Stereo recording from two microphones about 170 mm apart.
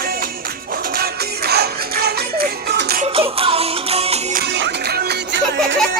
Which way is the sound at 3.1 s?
35° right (ahead or behind).